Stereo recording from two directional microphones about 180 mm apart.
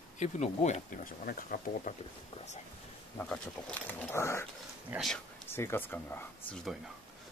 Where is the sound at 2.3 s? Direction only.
40° left (ahead or behind).